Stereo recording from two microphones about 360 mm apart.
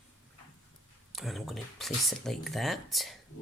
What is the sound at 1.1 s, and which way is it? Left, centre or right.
Speech, centre.